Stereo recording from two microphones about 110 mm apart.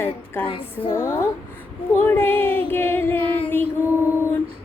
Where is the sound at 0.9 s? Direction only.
25° left (ahead or behind).